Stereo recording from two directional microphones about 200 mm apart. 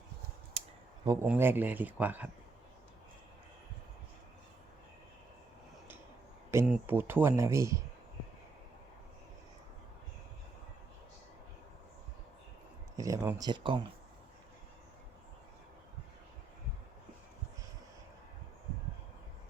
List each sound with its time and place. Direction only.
0.6 s a sound: 30° right (ahead or behind)
1.0 s speech: 20° right (ahead or behind)
6.5 s speech: 10° right (ahead or behind)
13.0 s speech: 15° right (ahead or behind)